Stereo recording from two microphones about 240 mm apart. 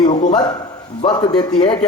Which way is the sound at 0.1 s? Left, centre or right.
Centre.